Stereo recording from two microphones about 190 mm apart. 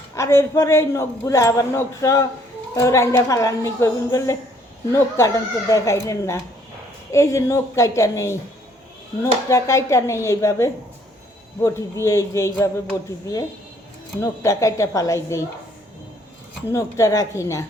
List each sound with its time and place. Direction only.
0.2 s a man's voice: 15° left (ahead or behind)
14.2 s a man's voice: 15° left (ahead or behind)
16.7 s a man's voice: 15° left (ahead or behind)